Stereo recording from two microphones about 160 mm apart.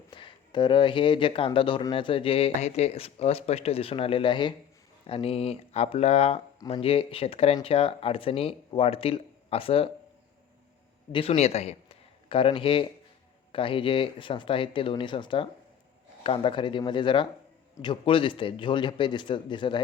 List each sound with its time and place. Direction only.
0.1 s speech: 30° left (ahead or behind)
11.1 s a man's voice: 35° left (ahead or behind)